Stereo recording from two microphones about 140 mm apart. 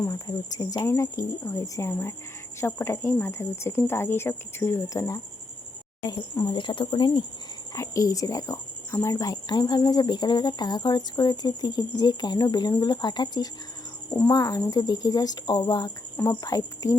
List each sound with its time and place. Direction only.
0.0 s speech: 25° left (ahead or behind)
6.5 s speech: 35° left (ahead or behind)
7.8 s a woman's voice: 25° left (ahead or behind)
16.1 s speech: 15° left (ahead or behind)